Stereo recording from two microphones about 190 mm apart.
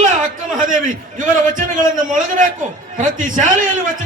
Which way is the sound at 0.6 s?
45° right (ahead or behind).